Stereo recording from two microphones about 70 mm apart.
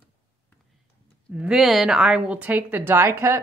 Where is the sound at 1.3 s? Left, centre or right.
Centre.